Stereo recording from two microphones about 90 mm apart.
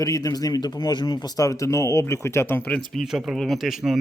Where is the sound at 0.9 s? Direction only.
55° left (ahead or behind); by 2.7 s 20° left (ahead or behind).